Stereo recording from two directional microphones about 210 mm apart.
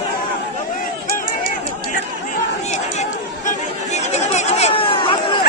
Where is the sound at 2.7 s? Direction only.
35° left (ahead or behind).